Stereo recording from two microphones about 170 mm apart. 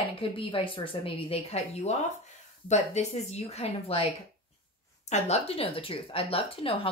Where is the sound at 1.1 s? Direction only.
35° left (ahead or behind).